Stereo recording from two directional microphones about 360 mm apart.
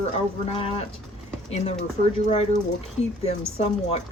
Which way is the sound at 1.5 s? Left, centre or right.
Centre.